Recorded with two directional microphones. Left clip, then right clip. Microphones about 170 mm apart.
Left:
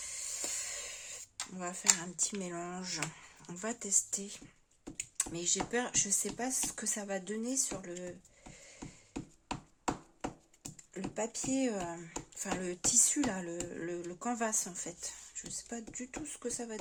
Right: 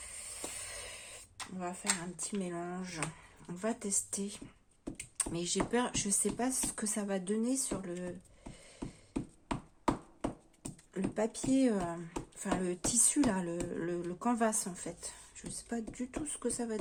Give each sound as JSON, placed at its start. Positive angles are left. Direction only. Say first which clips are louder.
{"t": 0.0, "sound": "a sound", "louder": "left 4 dB", "side_deg": 25}
{"t": 1.5, "sound": "speech", "louder": "left 4 dB", "side_deg": 25}
{"t": 10.6, "sound": "speech", "louder": "right 4 dB", "side_deg": 5}